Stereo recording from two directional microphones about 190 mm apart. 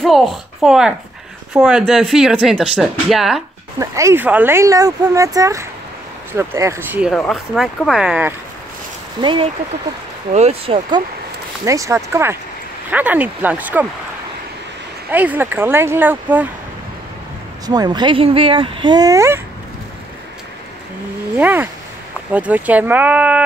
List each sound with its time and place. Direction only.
0.0 s speech: centre (ahead or behind)
3.8 s speech: 15° right (ahead or behind)
7.1 s speech: centre (ahead or behind)
9.2 s speech: 25° right (ahead or behind)
11.6 s speech: 15° right (ahead or behind)
15.0 s speech: 10° right (ahead or behind)
17.6 s speech: 20° right (ahead or behind)
21.4 s speech: 10° right (ahead or behind)